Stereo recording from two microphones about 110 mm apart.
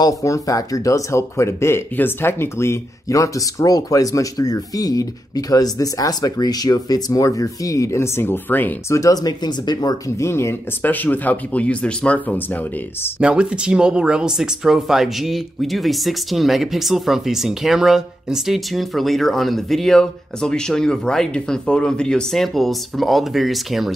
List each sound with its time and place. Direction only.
0.0 s speech: 30° left (ahead or behind)
13.2 s speech: 10° right (ahead or behind)